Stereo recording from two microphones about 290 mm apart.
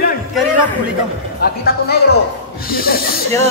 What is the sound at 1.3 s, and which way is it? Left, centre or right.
Speech, left.